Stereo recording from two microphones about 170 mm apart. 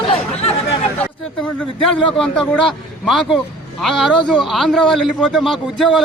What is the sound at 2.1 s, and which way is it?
A man's voice, 5° left (ahead or behind).